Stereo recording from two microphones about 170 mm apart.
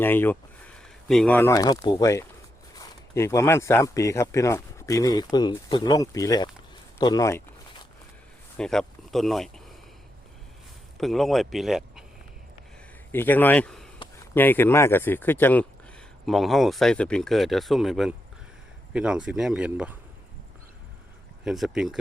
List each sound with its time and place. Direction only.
0.0 s speech: 10° left (ahead or behind)
0.8 s a sound: centre (ahead or behind)
1.4 s speech: 20° left (ahead or behind)
8.5 s speech: 5° left (ahead or behind)
10.9 s speech: centre (ahead or behind)
13.1 s speech: 10° left (ahead or behind)
16.2 s speech: centre (ahead or behind)
21.4 s speech: centre (ahead or behind)